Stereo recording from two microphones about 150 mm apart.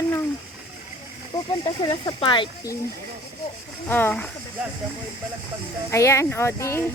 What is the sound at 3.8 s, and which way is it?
Speech, 10° left (ahead or behind).